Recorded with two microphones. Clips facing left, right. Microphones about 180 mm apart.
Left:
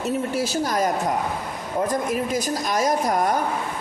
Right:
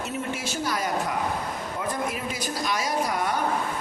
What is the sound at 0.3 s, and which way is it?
A woman's voice, 35° left (ahead or behind).